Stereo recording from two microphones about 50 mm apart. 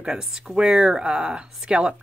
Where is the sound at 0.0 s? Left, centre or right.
Centre.